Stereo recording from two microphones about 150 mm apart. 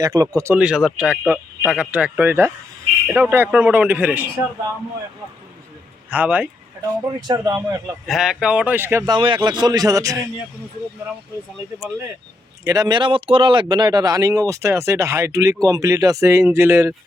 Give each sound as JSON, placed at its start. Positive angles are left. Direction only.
{"t": 0.0, "sound": "speech", "side_deg": -20}
{"t": 0.5, "sound": "speech", "side_deg": -5}
{"t": 6.1, "sound": "speech", "side_deg": -10}
{"t": 7.2, "sound": "speech", "side_deg": -25}
{"t": 8.0, "sound": "speech", "side_deg": 0}
{"t": 9.1, "sound": "speech", "side_deg": -30}
{"t": 12.6, "sound": "speech", "side_deg": -25}